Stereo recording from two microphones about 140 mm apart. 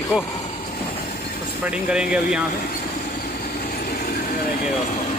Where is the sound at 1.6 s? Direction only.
5° right (ahead or behind).